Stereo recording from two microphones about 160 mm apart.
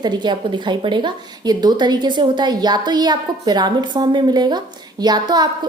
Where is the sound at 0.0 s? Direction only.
25° right (ahead or behind).